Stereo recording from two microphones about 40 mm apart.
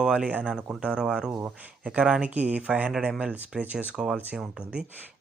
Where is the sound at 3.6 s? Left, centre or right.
Right.